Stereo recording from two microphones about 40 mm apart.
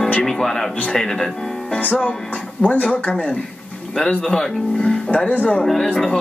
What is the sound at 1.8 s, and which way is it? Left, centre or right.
Music, left.